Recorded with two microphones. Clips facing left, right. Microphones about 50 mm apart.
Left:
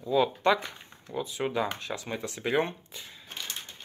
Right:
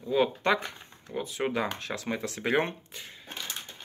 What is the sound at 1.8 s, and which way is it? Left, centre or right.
Speech, right.